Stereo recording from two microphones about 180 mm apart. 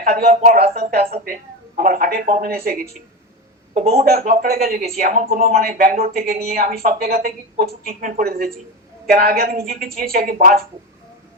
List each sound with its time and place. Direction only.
0.0 s speech: 55° right (ahead or behind)
4.2 s speech: 55° right (ahead or behind)
10.3 s speech: 45° right (ahead or behind)